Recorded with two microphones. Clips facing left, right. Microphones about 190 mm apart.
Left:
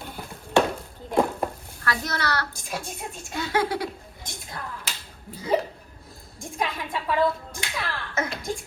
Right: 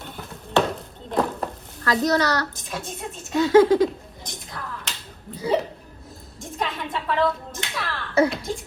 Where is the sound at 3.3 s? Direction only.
45° right (ahead or behind).